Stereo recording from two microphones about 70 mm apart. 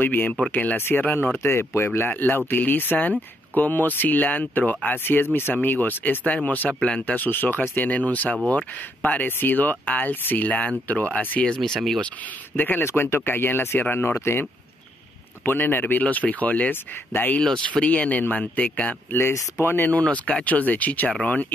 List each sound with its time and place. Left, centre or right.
0.0 s speech: left
1.4 s speech: left
1.9 s speech: left
11.4 s speech: centre
12.5 s speech: left
15.4 s speech: left
19.3 s speech: left